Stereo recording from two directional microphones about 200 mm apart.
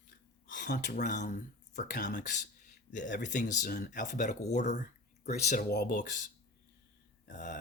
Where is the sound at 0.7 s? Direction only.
40° left (ahead or behind).